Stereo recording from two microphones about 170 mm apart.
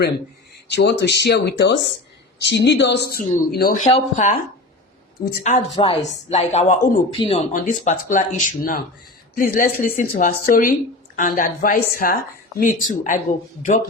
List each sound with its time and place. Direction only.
0.7 s speech: 80° left; by 3.8 s 60° left (ahead or behind)
3.9 s a woman's voice: 45° left (ahead or behind)
5.4 s a woman's voice: 45° left (ahead or behind)
7.5 s a woman's voice: 50° left (ahead or behind)